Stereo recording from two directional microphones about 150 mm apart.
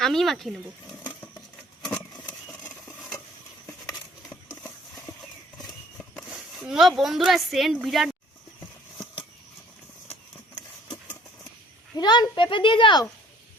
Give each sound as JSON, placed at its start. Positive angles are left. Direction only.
{"t": 0.0, "sound": "a woman's voice", "side_deg": 0}
{"t": 1.8, "sound": "vehicle", "side_deg": 5}
{"t": 5.1, "sound": "horse", "side_deg": 25}
{"t": 6.6, "sound": "a woman's voice", "side_deg": 0}
{"t": 11.9, "sound": "a child's voice", "side_deg": 30}